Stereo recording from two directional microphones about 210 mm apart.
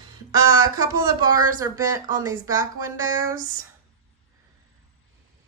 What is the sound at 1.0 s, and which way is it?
A woman's voice, 15° right (ahead or behind).